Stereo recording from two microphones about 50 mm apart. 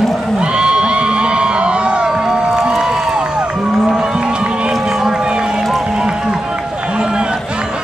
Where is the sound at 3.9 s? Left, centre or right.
Centre.